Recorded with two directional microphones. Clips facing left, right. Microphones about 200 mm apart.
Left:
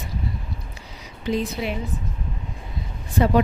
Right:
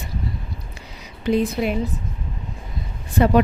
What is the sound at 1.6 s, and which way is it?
Speech, 50° right (ahead or behind).